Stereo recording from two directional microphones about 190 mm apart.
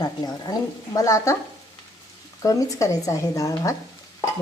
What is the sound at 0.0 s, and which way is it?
A woman's voice, 20° left (ahead or behind).